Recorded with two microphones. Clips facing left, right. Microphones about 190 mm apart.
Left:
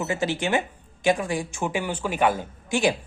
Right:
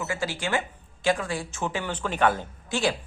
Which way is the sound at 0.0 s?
20° left (ahead or behind).